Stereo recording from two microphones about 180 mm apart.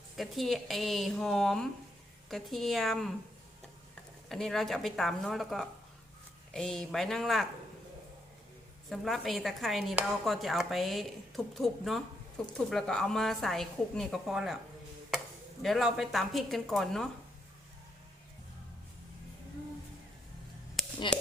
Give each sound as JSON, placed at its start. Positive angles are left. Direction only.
{"t": 0.2, "sound": "speech", "side_deg": 0}
{"t": 4.3, "sound": "speech", "side_deg": 0}
{"t": 8.9, "sound": "speech", "side_deg": 0}
{"t": 15.6, "sound": "speech", "side_deg": 0}
{"t": 21.1, "sound": "speech", "side_deg": 25}